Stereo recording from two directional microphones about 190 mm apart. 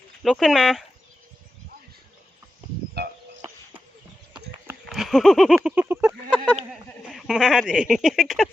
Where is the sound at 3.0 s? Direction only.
55° right (ahead or behind).